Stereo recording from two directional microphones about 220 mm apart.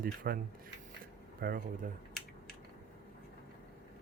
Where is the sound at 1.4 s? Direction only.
40° right (ahead or behind).